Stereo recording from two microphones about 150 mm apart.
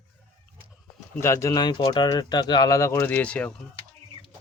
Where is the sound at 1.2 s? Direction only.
20° left (ahead or behind).